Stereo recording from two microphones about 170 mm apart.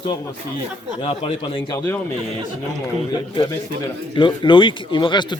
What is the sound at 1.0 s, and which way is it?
Speech, 30° left (ahead or behind).